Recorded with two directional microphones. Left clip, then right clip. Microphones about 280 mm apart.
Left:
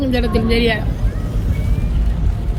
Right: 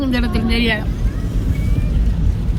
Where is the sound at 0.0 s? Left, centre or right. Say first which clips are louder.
Left 2 dB; centre.